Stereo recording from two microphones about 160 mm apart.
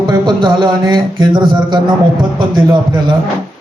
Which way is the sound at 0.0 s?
30° right (ahead or behind).